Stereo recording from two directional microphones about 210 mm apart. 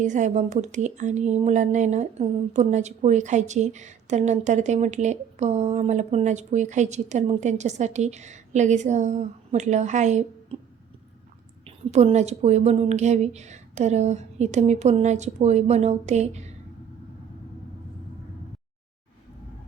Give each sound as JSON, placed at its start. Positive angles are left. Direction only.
{"t": 0.0, "sound": "speech", "side_deg": -35}
{"t": 11.6, "sound": "speech", "side_deg": -30}